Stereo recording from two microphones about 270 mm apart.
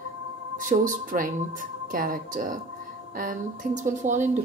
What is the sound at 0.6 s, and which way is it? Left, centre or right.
Speech, right.